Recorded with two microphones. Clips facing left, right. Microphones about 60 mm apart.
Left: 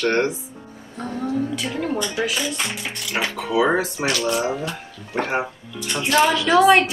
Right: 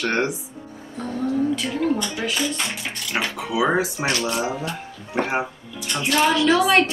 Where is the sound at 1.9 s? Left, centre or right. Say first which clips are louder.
Left 1 dB; centre.